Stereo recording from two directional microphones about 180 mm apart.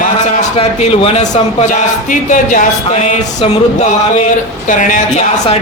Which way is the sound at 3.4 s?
30° left (ahead or behind).